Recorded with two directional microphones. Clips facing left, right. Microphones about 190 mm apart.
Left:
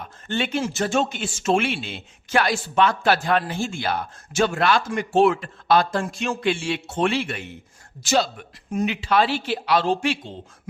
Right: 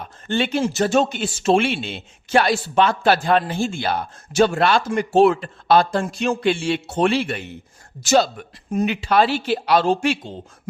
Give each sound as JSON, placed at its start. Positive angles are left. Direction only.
{"t": 0.3, "sound": "speech", "side_deg": -30}
{"t": 8.0, "sound": "speech", "side_deg": -45}